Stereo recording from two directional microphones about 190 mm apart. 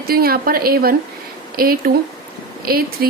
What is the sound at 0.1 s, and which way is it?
A woman's voice, 50° right (ahead or behind).